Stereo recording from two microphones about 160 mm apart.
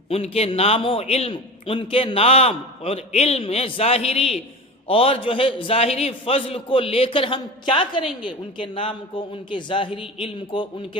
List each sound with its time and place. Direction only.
0.1 s a man's voice: 40° left (ahead or behind)